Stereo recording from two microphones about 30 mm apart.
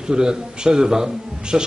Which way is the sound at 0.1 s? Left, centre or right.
Right.